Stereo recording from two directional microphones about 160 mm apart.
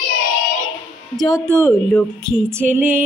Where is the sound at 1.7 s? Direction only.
15° left (ahead or behind).